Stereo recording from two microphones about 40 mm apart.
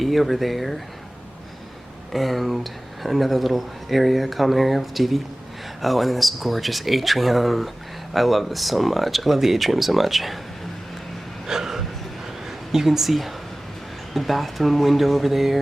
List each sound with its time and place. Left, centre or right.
0.0 s speech: centre
2.1 s speech: centre
11.4 s a sound: centre
12.5 s a woman's voice: centre